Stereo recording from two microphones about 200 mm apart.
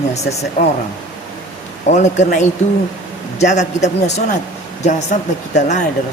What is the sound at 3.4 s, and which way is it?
Speech, 35° left (ahead or behind).